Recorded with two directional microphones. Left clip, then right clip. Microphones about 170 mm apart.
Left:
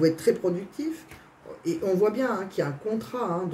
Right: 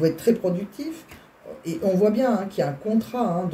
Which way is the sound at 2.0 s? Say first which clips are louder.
Right 6 dB; 30° left (ahead or behind).